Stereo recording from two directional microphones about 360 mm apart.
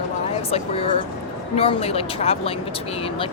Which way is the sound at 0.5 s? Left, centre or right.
Centre.